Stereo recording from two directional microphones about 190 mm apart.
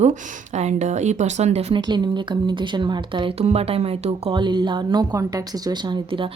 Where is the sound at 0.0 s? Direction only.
35° right (ahead or behind).